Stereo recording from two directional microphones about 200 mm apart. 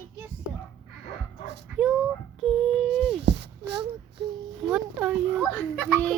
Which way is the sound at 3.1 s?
60° right (ahead or behind).